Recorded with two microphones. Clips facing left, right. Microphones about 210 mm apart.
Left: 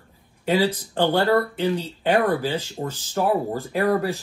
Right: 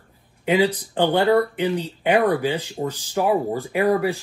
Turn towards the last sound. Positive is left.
turn(degrees=-15)  # may be behind; listen again after turning